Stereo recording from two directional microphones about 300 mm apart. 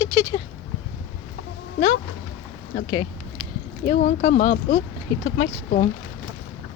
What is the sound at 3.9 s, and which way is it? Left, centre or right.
Speech, left.